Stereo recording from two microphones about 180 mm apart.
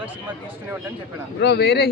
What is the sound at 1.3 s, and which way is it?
Speech, 65° left (ahead or behind).